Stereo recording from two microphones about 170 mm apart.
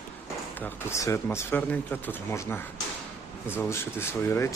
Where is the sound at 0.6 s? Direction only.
15° left (ahead or behind).